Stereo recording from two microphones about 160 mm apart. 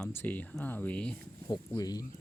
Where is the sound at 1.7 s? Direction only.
25° left (ahead or behind).